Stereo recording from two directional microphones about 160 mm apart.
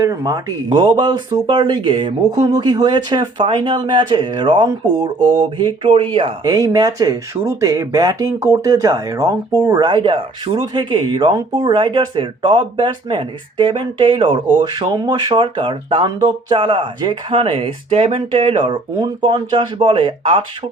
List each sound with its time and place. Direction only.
0.0 s speech: 20° right (ahead or behind)